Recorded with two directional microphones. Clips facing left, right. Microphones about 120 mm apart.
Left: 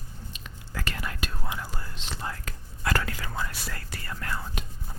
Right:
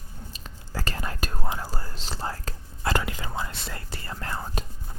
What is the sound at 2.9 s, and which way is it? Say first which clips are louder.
Speech: right 1 dB; 20° right (ahead or behind).